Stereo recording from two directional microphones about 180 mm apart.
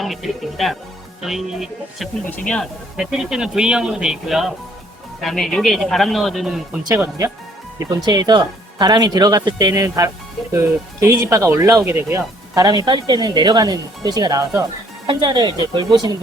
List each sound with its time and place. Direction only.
0.0 s speech: centre (ahead or behind)
6.8 s speech: 15° right (ahead or behind)